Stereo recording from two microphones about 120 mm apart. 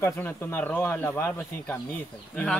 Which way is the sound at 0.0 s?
20° left (ahead or behind).